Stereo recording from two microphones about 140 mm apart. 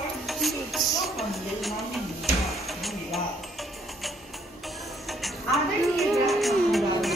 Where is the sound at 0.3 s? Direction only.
Centre (ahead or behind).